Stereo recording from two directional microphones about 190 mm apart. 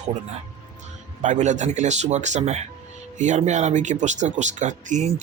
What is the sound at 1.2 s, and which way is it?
Speech, 40° right (ahead or behind).